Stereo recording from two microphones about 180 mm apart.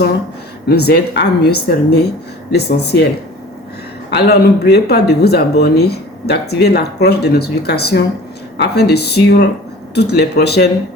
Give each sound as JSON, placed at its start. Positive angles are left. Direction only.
{"t": 0.7, "sound": "speech", "side_deg": 65}
{"t": 4.1, "sound": "speech", "side_deg": 60}